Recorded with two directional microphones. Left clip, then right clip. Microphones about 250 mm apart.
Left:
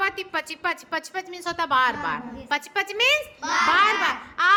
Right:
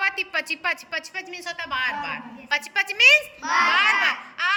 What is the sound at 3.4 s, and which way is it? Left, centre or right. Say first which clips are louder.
Speech: right 2 dB; left.